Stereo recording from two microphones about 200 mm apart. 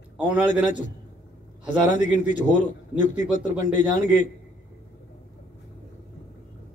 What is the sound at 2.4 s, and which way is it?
A man's voice, 35° left (ahead or behind).